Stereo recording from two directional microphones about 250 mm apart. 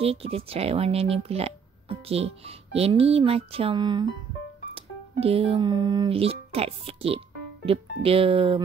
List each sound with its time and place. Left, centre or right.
0.0 s speech: right